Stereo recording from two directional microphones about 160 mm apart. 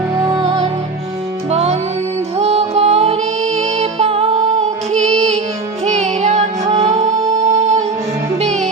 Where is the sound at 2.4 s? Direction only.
40° right (ahead or behind).